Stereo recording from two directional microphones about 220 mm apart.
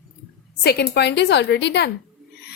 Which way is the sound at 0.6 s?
45° left (ahead or behind).